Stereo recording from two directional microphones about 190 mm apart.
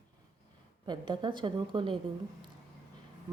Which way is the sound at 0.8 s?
25° right (ahead or behind).